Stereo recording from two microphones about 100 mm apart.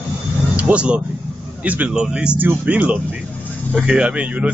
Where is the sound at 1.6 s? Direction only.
15° right (ahead or behind).